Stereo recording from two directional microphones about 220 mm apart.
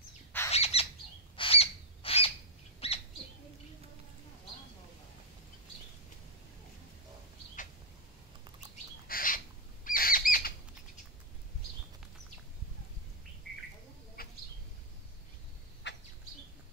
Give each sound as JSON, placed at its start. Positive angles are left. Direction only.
{"t": 0.5, "sound": "bird", "side_deg": 25}
{"t": 1.3, "sound": "owl", "side_deg": 25}
{"t": 2.8, "sound": "a sound", "side_deg": 25}
{"t": 9.0, "sound": "bird", "side_deg": 40}
{"t": 9.8, "sound": "bird flight", "side_deg": 40}
{"t": 14.2, "sound": "bird", "side_deg": 40}
{"t": 15.8, "sound": "bird", "side_deg": 50}